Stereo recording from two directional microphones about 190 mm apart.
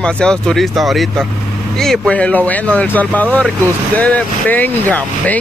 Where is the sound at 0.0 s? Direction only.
5° left (ahead or behind).